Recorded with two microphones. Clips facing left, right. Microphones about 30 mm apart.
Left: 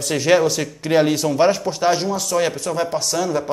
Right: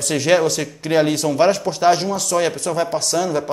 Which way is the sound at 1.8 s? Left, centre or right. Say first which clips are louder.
Right 2 dB; centre.